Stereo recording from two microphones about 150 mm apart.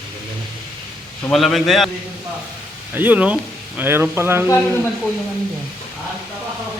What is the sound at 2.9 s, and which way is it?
A man's voice, 10° right (ahead or behind).